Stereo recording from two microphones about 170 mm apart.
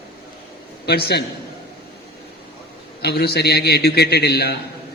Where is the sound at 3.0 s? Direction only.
70° left (ahead or behind).